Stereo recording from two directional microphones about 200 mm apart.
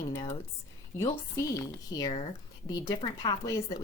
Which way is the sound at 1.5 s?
20° left (ahead or behind).